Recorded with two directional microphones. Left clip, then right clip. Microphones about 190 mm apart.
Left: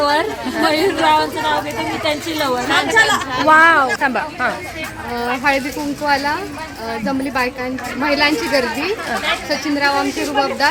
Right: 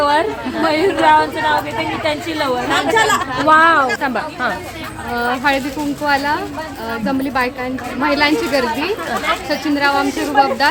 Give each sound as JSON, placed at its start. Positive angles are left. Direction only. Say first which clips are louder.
{"t": 0.0, "sound": "a woman's voice", "louder": "right 1 dB", "side_deg": 5}
{"t": 2.9, "sound": "a woman's voice", "louder": "even", "side_deg": -35}
{"t": 3.4, "sound": "a woman's voice", "louder": "left 1 dB", "side_deg": 0}